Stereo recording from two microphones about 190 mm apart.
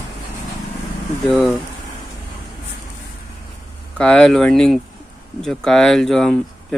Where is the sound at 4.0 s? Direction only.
5° left (ahead or behind).